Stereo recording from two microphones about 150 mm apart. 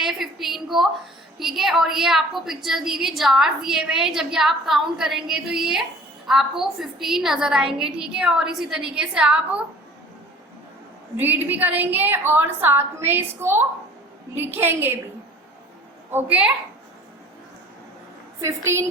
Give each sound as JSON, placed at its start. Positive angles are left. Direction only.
{"t": 0.0, "sound": "a woman's voice", "side_deg": 0}
{"t": 11.2, "sound": "a woman's voice", "side_deg": -10}
{"t": 16.1, "sound": "a woman's voice", "side_deg": -10}
{"t": 18.3, "sound": "a woman's voice", "side_deg": -20}